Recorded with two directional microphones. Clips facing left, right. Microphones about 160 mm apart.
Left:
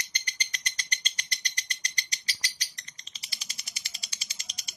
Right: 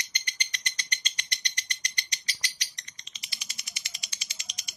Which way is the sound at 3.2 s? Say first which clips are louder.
Even; 35° left (ahead or behind).